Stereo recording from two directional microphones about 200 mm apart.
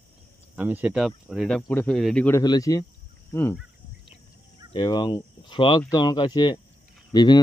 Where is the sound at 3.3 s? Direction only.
15° left (ahead or behind).